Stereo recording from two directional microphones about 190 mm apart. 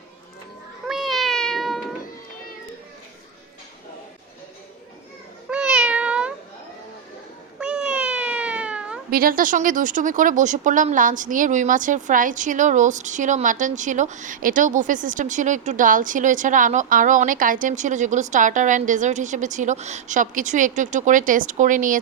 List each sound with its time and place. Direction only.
0.9 s cat: centre (ahead or behind)
5.5 s cat: 5° right (ahead or behind)
7.6 s cat: 5° right (ahead or behind)
9.0 s speech: 50° right (ahead or behind)